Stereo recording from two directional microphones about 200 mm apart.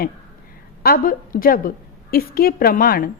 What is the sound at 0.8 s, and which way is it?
A woman's voice, 45° left (ahead or behind).